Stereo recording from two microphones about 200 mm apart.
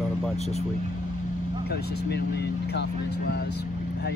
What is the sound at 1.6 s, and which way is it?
Speech, 55° left (ahead or behind).